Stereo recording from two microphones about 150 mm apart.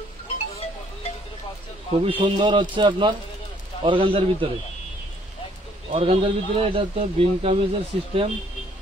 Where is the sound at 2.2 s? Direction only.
30° right (ahead or behind).